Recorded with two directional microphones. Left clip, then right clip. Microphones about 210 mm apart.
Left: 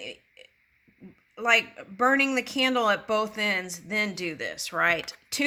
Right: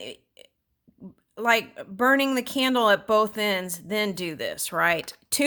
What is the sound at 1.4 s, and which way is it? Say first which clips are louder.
Speech: even; 50° right (ahead or behind).